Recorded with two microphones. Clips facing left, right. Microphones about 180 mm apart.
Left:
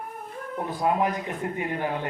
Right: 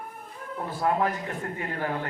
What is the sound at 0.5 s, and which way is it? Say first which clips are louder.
Speech: left 1 dB; 20° left (ahead or behind).